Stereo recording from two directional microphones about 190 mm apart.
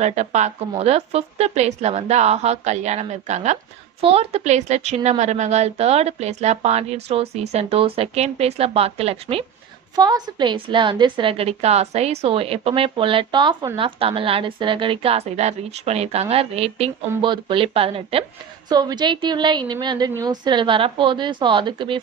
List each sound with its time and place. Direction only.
0.0 s speech: 35° right (ahead or behind)
9.9 s a woman's voice: 20° right (ahead or behind)